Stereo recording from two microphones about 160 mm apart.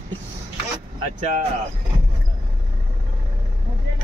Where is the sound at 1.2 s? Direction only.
50° right (ahead or behind).